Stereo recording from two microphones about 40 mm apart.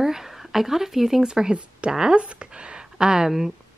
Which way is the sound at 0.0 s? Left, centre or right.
Centre.